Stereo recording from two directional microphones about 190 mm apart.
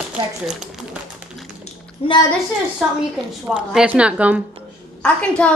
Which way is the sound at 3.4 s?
5° right (ahead or behind).